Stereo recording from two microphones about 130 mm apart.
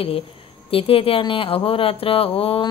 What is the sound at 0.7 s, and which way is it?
Speech, 45° left (ahead or behind).